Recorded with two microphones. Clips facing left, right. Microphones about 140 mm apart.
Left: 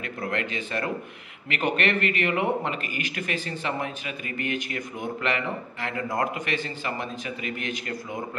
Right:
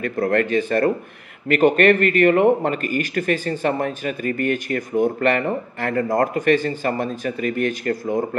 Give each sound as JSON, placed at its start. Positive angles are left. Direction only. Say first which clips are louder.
{"t": 0.0, "sound": "speech", "louder": "right 10 dB", "side_deg": -50}